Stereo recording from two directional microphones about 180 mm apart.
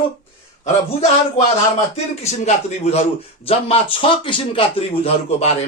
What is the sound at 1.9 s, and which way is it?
A man's voice, 35° left (ahead or behind).